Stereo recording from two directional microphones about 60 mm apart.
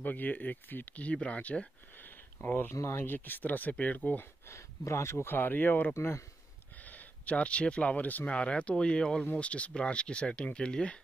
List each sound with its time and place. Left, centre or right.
0.0 s speech: left
2.7 s speech: left
3.1 s speech: left
4.2 s speech: left
5.9 s speech: left
6.8 s speech: left